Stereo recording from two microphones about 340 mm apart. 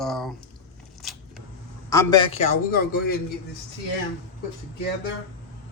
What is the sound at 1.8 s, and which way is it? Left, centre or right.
A man's voice, centre.